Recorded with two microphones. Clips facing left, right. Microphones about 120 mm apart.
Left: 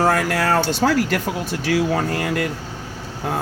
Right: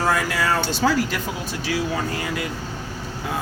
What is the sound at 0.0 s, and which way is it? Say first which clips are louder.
Speech: left 4 dB; 60° left (ahead or behind).